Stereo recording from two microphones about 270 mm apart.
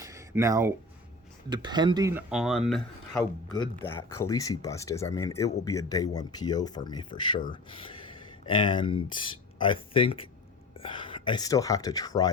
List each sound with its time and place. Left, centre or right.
0.0 s a sound: centre
1.5 s speech: centre
3.2 s speech: centre